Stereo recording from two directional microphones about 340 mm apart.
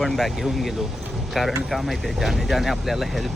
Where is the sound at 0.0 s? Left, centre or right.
Centre.